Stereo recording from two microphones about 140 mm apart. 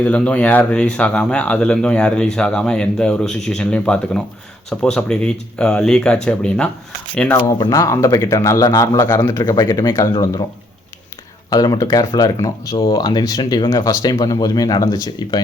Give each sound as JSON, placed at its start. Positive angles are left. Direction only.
{"t": 0.0, "sound": "speech", "side_deg": 10}
{"t": 7.6, "sound": "speech", "side_deg": 25}
{"t": 11.5, "sound": "speech", "side_deg": 25}